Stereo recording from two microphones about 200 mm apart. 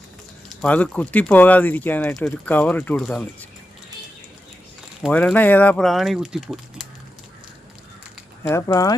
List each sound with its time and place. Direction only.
0.6 s speech: 5° left (ahead or behind)
5.1 s speech: 10° left (ahead or behind)
8.4 s speech: 15° left (ahead or behind)